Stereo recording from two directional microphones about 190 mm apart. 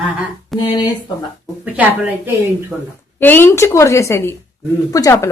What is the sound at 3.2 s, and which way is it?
Speech, 10° left (ahead or behind).